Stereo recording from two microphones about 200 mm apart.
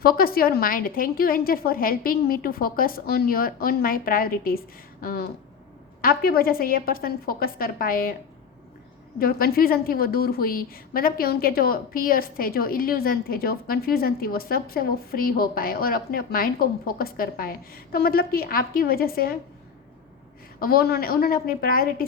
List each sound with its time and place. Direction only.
0.0 s a woman's voice: 50° left (ahead or behind)
9.1 s a woman's voice: 50° left (ahead or behind)
20.6 s a woman's voice: 50° left (ahead or behind)